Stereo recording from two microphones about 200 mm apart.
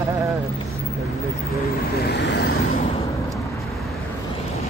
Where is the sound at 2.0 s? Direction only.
55° left (ahead or behind).